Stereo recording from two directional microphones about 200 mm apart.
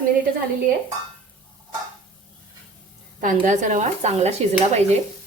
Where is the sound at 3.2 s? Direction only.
40° right (ahead or behind).